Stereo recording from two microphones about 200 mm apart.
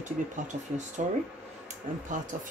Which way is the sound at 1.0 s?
40° right (ahead or behind).